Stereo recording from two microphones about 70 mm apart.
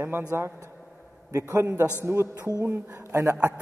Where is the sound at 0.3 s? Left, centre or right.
Right.